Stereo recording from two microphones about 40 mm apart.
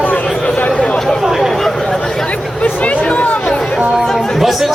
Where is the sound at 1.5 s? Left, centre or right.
Centre.